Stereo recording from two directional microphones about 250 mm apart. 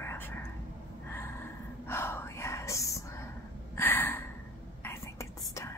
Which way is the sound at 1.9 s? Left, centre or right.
Centre.